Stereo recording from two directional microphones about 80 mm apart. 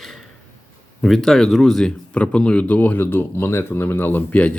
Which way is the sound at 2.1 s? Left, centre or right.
Centre.